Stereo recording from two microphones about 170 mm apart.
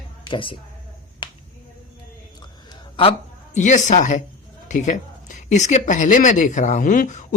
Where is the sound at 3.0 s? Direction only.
40° left (ahead or behind).